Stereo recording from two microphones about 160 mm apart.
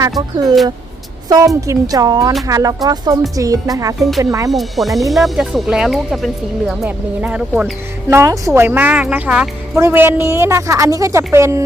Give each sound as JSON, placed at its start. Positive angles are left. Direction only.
{"t": 0.2, "sound": "speech", "side_deg": -25}
{"t": 1.6, "sound": "speech", "side_deg": -20}
{"t": 4.5, "sound": "speech", "side_deg": 0}
{"t": 8.1, "sound": "speech", "side_deg": -20}